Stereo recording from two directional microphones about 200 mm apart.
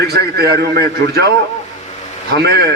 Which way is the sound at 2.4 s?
55° right (ahead or behind).